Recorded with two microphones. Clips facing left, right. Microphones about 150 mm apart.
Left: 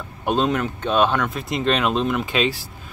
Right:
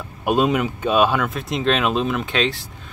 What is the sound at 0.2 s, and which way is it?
Speech, 10° right (ahead or behind).